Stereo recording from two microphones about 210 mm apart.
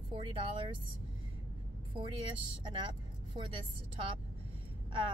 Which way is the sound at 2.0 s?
25° right (ahead or behind).